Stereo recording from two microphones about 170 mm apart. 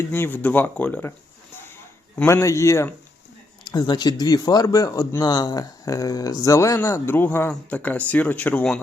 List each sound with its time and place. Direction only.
0.1 s speech: 10° left (ahead or behind)
2.1 s speech: 15° left (ahead or behind)